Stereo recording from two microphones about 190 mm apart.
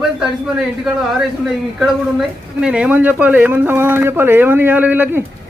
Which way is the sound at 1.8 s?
5° right (ahead or behind).